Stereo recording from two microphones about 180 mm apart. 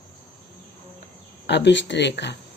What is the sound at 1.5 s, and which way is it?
Speech, 75° left (ahead or behind).